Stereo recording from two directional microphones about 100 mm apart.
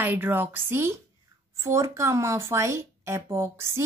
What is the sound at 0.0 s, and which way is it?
Speech, 20° right (ahead or behind).